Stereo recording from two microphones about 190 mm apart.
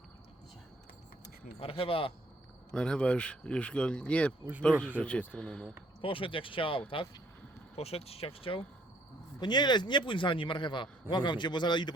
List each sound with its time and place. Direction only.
1.5 s a man's voice: 30° left (ahead or behind)
2.7 s speech: 5° left (ahead or behind)
6.0 s a man's voice: 30° left (ahead or behind)